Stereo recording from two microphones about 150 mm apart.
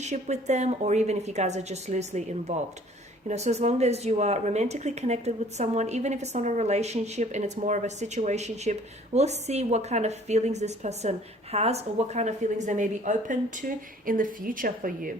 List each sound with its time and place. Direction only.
0.0 s speech: 50° right (ahead or behind); by 15.1 s 65° right (ahead or behind)